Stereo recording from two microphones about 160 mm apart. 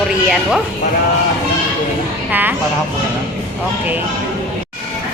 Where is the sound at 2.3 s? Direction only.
10° right (ahead or behind).